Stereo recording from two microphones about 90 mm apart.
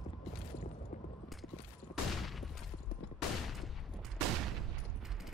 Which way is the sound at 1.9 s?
Centre (ahead or behind).